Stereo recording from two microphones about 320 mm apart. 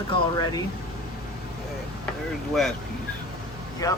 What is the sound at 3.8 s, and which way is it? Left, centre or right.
Speech, centre.